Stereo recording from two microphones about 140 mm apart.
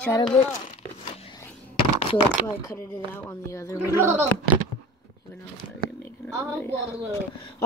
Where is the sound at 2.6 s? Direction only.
20° left (ahead or behind).